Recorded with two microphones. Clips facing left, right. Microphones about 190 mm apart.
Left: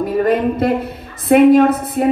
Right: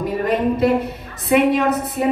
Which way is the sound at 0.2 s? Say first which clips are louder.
Left 2 dB; 55° left (ahead or behind).